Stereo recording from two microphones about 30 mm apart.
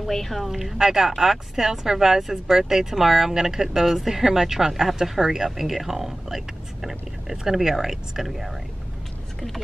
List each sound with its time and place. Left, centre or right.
0.1 s speech: centre
0.4 s speech: centre
1.1 s speech: centre